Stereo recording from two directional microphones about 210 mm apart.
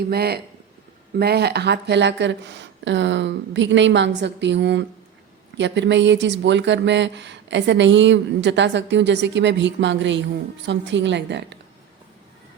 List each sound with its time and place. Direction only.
0.1 s speech: 50° right (ahead or behind)